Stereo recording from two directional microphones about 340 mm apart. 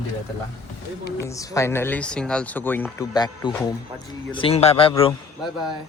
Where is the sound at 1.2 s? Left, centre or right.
Centre.